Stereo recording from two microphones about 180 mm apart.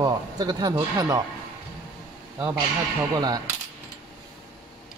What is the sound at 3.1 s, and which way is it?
Speech, 20° right (ahead or behind).